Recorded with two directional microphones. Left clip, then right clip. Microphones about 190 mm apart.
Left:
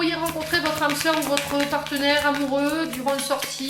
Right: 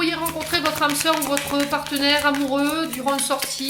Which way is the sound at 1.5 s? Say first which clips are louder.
Right 1 dB; 25° right (ahead or behind).